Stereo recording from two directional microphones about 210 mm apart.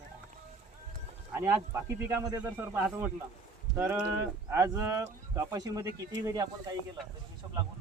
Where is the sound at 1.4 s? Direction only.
15° right (ahead or behind).